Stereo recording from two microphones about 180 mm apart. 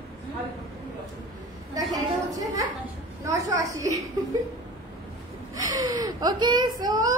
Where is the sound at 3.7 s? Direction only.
20° right (ahead or behind).